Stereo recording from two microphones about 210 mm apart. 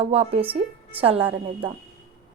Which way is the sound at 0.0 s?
30° right (ahead or behind).